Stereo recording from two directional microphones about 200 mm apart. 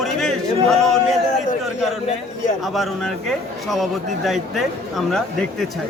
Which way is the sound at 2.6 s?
Centre (ahead or behind).